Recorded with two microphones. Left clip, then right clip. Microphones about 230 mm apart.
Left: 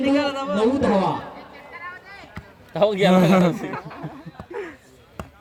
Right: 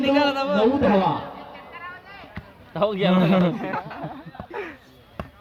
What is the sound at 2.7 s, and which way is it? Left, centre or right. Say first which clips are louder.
Speech: left 4 dB; left.